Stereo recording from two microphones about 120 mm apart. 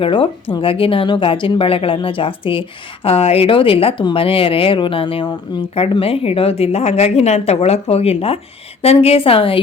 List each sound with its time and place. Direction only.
0.0 s a woman's voice: 45° left (ahead or behind)